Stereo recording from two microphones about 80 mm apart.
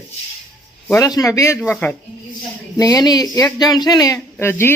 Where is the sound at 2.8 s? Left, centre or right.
Left.